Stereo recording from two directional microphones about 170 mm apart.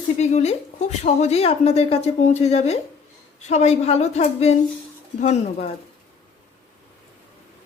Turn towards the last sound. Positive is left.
turn(degrees=40)  # may be behind; listen again after turning